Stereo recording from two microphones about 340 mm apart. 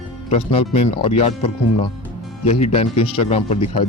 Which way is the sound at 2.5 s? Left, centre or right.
Centre.